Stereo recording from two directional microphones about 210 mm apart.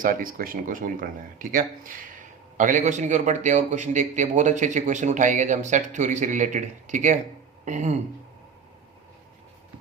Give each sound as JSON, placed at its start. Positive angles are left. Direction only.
{"t": 0.0, "sound": "a man's voice", "side_deg": -40}